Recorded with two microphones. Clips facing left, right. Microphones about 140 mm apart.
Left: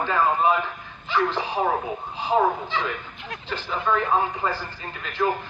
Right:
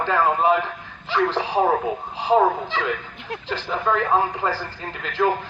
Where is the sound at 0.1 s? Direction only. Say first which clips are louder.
Right 3 dB; 70° right (ahead or behind).